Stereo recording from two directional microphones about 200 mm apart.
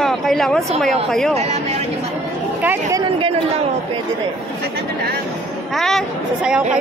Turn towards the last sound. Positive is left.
turn(degrees=0)  # may be behind; listen again after turning